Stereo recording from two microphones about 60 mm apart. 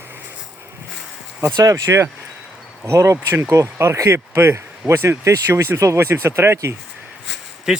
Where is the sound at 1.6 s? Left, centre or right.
Right.